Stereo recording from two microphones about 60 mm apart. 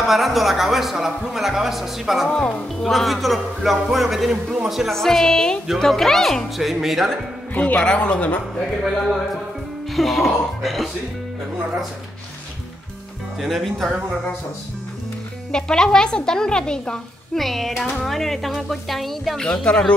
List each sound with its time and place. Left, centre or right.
0.0 s speech: centre
4.9 s a woman's voice: centre
7.5 s speech: left
8.8 s speech: centre
13.4 s speech: centre
15.5 s a woman's voice: centre
17.4 s speech: centre
19.4 s a woman's voice: centre